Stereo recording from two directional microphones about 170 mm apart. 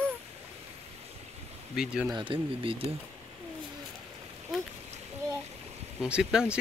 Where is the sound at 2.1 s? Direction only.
30° right (ahead or behind).